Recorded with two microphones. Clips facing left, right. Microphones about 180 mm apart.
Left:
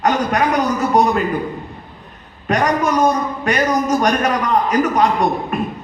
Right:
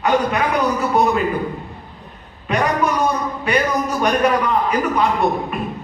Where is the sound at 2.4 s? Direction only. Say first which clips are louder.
Left 2 dB; 45° left (ahead or behind).